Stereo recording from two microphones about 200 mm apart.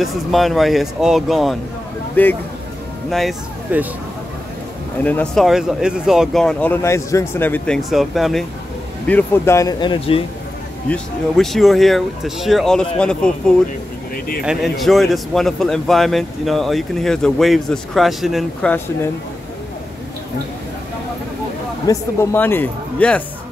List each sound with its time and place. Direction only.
0.0 s a man's voice: centre (ahead or behind)
5.0 s speech: 5° left (ahead or behind); by 10.2 s 30° left (ahead or behind)
10.9 s speech: centre (ahead or behind)
14.1 s a sound: 45° left (ahead or behind)
14.4 s speech: centre (ahead or behind)
21.8 s a man's voice: 10° left (ahead or behind)